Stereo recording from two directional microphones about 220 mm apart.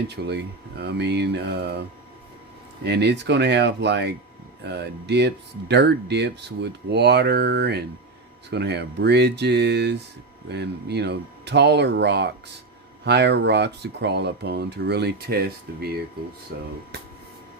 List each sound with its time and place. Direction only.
0.3 s speech: 50° right (ahead or behind)
2.8 s speech: 50° right (ahead or behind)